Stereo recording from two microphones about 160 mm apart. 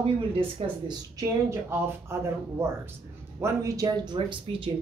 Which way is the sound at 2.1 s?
15° right (ahead or behind).